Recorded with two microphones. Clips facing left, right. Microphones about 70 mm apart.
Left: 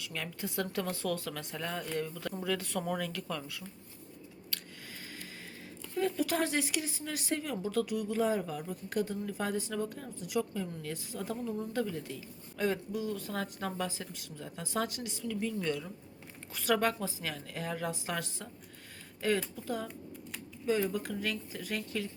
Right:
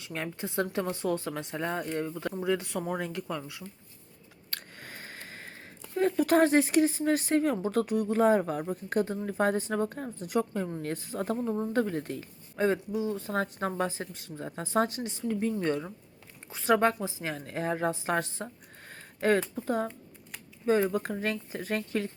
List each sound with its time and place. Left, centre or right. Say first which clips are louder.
0.0 s speech: right 4 dB; right
4.5 s a sound: right 4 dB; right
5.9 s speech: right 7 dB; right
12.5 s speech: right 5 dB; right